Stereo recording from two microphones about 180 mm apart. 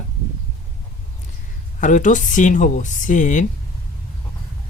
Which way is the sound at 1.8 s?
45° left (ahead or behind).